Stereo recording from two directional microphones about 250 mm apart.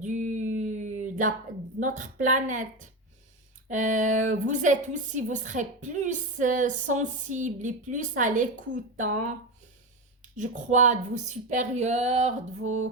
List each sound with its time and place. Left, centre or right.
0.0 s a sound: right
1.8 s a woman's voice: right
10.3 s speech: right